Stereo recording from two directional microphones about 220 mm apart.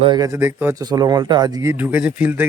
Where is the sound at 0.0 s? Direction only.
20° right (ahead or behind).